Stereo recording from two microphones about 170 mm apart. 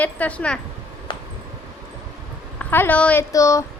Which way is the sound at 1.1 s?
25° left (ahead or behind).